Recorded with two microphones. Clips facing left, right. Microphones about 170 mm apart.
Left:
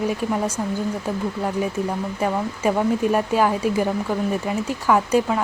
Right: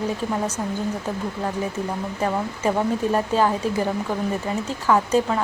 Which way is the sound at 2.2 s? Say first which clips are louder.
Even; 10° left (ahead or behind).